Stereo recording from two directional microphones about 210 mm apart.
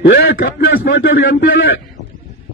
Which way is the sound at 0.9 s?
65° left (ahead or behind).